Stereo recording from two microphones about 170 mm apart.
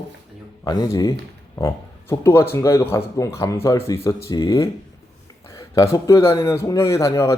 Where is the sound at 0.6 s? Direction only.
20° left (ahead or behind).